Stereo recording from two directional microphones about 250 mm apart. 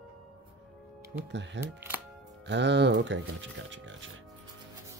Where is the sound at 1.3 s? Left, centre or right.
Right.